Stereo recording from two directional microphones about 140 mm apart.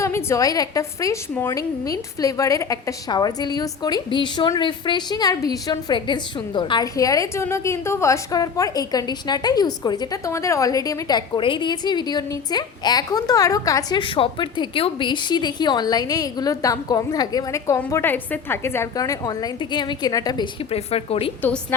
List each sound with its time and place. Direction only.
0.0 s a woman's voice: 20° left (ahead or behind)
14.0 s a woman's voice: 35° left (ahead or behind)
17.7 s a woman's voice: 15° left (ahead or behind)
20.7 s speech: 45° left (ahead or behind)